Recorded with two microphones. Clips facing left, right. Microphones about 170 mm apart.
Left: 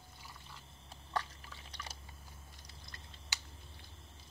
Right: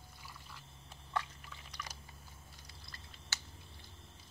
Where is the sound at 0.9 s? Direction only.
35° left (ahead or behind).